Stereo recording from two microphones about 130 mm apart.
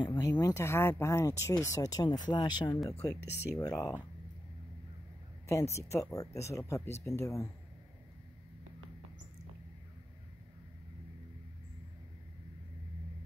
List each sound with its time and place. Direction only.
0.0 s speech: 35° left (ahead or behind)
5.5 s speech: 20° left (ahead or behind)